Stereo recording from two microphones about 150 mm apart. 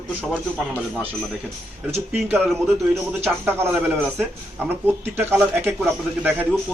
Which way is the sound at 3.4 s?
15° right (ahead or behind).